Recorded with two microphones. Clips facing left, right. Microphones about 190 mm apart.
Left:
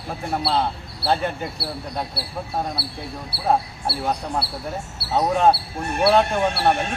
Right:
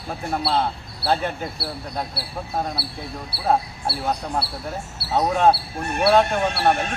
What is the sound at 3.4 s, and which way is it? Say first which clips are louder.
Speech: even; centre (ahead or behind).